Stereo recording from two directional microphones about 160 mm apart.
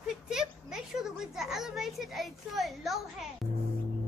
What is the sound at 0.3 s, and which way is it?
Speech, 5° right (ahead or behind).